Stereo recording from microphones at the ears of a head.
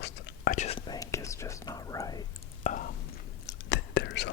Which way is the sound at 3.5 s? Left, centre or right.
Left.